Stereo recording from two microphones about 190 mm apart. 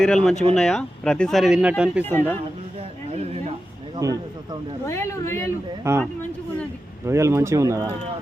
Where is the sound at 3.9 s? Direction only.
20° right (ahead or behind).